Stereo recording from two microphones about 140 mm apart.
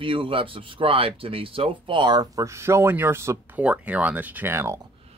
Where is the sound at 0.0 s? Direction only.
40° right (ahead or behind); by 4.7 s 15° right (ahead or behind).